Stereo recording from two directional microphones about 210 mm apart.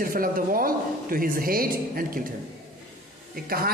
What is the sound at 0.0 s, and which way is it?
A man's voice, 45° right (ahead or behind).